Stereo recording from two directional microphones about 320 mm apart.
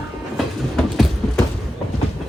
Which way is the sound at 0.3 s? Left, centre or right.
Centre.